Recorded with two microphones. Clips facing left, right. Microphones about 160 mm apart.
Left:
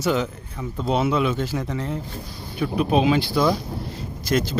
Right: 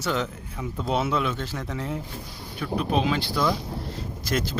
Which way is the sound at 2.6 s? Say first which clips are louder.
Left 5 dB; 10° left (ahead or behind).